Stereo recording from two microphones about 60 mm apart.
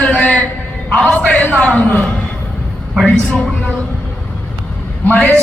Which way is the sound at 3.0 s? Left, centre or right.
Centre.